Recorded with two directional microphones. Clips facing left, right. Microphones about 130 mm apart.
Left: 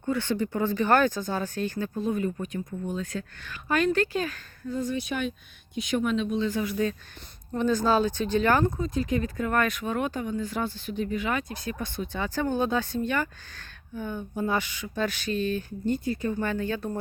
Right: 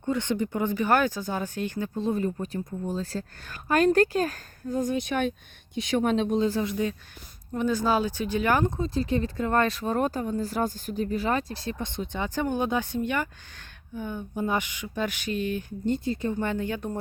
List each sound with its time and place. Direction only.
0.1 s speech: 20° right (ahead or behind)
2.0 s speech: 30° right (ahead or behind)
6.6 s speech: 20° right (ahead or behind)
8.8 s speech: 30° right (ahead or behind)